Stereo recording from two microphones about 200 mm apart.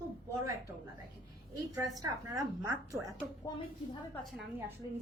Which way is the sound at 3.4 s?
15° left (ahead or behind).